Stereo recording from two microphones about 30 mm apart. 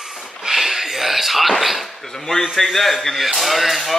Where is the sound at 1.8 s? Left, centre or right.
Centre.